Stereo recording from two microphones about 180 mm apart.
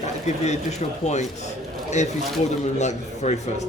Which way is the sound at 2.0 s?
40° left (ahead or behind).